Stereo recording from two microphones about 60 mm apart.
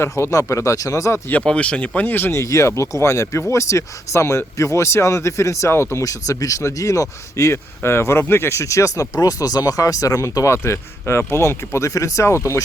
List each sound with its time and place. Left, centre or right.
0.0 s speech: left
0.3 s speech: left
1.5 s speech: left
2.0 s speech: left
2.3 s speech: left
6.0 s speech: left
7.8 s speech: left